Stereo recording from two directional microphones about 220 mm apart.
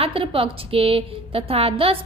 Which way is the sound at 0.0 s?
25° right (ahead or behind).